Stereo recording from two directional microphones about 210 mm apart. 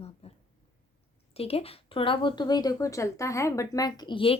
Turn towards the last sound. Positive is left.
turn(degrees=25)  # may be behind; listen again after turning